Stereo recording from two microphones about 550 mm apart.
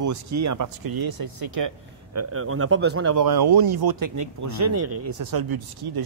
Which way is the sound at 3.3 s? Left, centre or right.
Right.